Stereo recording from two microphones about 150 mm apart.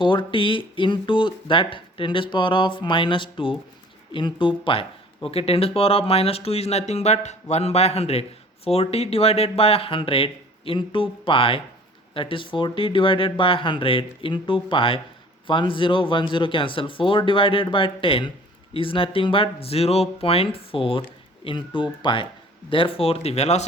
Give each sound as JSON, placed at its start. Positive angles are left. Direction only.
{"t": 0.0, "sound": "speech", "side_deg": 35}